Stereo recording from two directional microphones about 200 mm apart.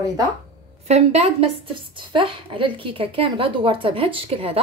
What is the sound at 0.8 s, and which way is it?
A woman's voice, 30° right (ahead or behind).